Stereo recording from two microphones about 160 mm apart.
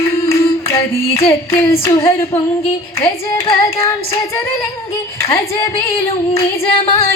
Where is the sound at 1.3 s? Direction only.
15° left (ahead or behind).